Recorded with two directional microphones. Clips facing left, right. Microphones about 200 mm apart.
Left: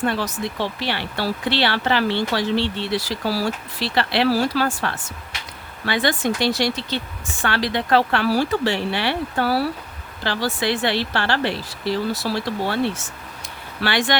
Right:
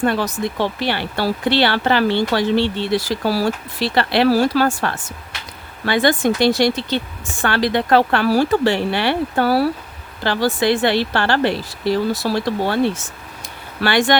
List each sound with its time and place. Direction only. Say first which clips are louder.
0.0 s speech: right 4 dB; 50° right (ahead or behind)
13.8 s speech: right 5 dB; 50° right (ahead or behind)